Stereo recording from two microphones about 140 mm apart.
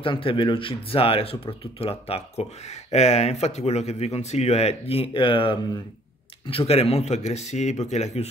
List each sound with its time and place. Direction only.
0.0 s speech: 40° left (ahead or behind)